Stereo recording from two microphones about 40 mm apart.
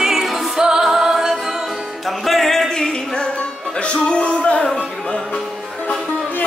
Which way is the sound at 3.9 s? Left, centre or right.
Left.